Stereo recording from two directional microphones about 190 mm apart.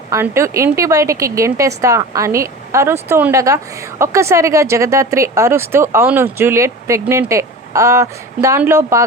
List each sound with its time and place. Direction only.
0.1 s a woman's voice: 15° right (ahead or behind)